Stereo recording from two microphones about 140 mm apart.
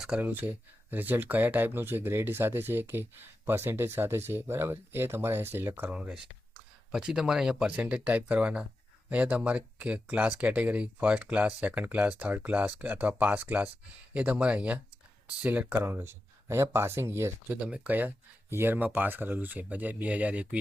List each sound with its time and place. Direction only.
0.0 s speech: 10° right (ahead or behind)